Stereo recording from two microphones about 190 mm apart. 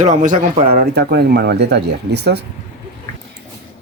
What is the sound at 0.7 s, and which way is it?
Speech, 55° right (ahead or behind).